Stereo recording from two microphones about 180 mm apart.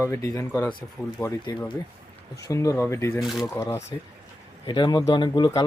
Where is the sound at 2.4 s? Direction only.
20° left (ahead or behind).